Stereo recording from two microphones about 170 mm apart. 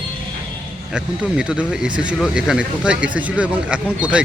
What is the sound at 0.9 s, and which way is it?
Speech, 5° right (ahead or behind).